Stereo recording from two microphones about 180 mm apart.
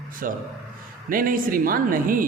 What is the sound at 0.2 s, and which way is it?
A man's voice, 50° right (ahead or behind).